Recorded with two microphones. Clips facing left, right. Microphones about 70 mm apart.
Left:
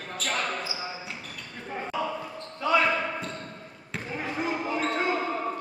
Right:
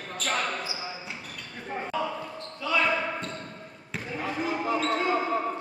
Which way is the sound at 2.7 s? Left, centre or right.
Centre.